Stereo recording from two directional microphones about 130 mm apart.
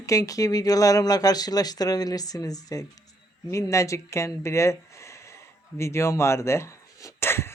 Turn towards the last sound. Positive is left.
turn(degrees=20)  # may be behind; listen again after turning